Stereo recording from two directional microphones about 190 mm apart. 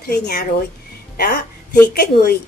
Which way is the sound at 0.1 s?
55° left (ahead or behind).